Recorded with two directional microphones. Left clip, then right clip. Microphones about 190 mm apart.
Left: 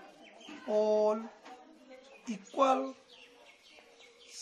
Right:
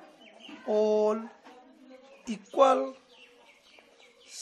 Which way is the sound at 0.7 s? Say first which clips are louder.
Right 3 dB; 40° right (ahead or behind).